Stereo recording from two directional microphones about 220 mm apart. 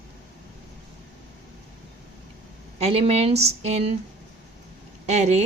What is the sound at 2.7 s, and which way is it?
A woman's voice, 30° right (ahead or behind).